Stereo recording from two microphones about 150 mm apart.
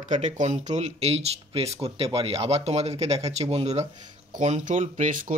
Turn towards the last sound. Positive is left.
turn(degrees=-55)  # may be behind; listen again after turning